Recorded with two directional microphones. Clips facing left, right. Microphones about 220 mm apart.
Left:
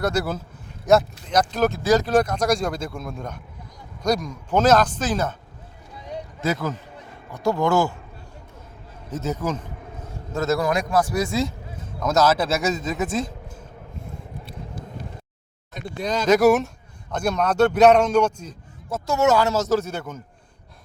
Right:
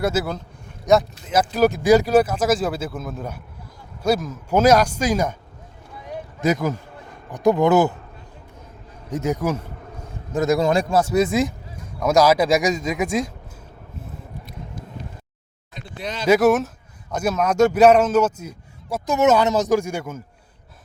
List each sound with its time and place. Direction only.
0.0 s a man's voice: 5° right (ahead or behind)
6.4 s a man's voice: 15° right (ahead or behind)
9.0 s a sound: 15° right (ahead or behind)
10.7 s a man's voice: 25° right (ahead or behind); by 13.3 s 10° right (ahead or behind)
15.7 s speech: 45° left (ahead or behind)
16.2 s a man's voice: 5° right (ahead or behind)